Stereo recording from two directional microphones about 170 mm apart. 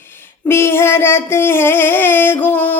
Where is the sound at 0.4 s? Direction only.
15° left (ahead or behind).